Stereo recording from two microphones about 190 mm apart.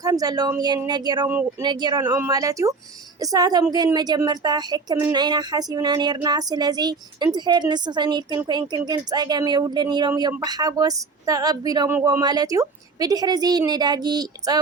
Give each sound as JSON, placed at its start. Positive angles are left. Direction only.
{"t": 0.0, "sound": "speech", "side_deg": -20}